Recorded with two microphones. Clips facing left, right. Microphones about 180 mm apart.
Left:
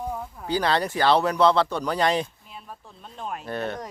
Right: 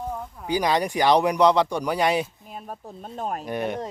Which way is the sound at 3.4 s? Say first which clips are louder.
Right 1 dB; 15° right (ahead or behind).